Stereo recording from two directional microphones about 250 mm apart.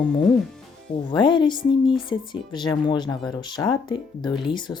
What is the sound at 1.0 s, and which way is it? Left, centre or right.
Speech, centre.